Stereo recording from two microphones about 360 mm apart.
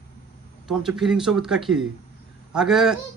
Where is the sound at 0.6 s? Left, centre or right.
Centre.